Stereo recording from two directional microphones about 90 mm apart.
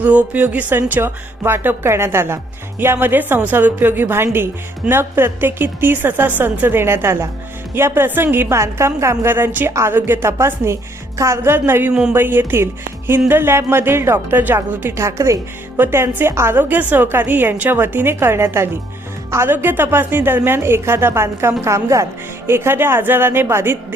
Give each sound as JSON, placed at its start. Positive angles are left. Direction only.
{"t": 0.0, "sound": "a woman's voice", "side_deg": -15}